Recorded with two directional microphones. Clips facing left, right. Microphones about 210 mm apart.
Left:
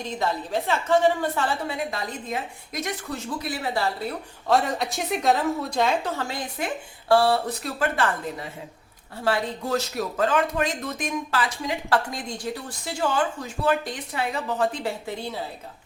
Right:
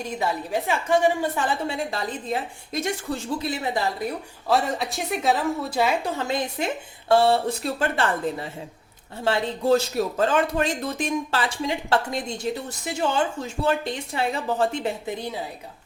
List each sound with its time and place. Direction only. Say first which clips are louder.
0.0 s a woman's voice: even; 10° right (ahead or behind)
1.6 s speech: right 2 dB; 30° right (ahead or behind)
4.4 s a woman's voice: even; centre (ahead or behind); by 15.4 s 15° right (ahead or behind)